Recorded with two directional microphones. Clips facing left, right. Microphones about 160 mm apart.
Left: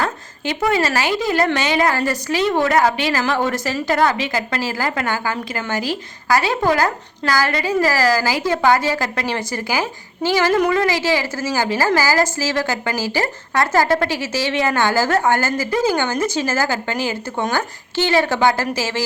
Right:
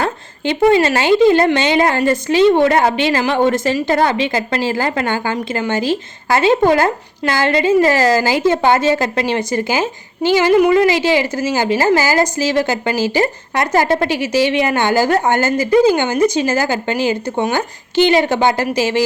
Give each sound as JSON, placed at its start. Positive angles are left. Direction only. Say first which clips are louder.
{"t": 0.0, "sound": "a woman's voice", "louder": "right 4 dB", "side_deg": -25}